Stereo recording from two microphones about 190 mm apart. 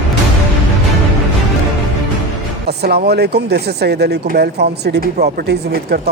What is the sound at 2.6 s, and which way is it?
Speech, 60° right (ahead or behind).